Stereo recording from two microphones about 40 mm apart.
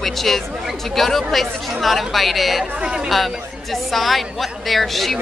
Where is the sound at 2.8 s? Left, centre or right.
Right.